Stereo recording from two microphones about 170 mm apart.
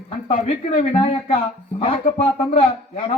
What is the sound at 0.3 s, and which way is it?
Speech, 35° left (ahead or behind).